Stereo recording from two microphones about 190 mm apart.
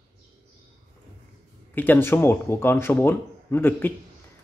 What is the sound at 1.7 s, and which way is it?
Speech, 10° left (ahead or behind).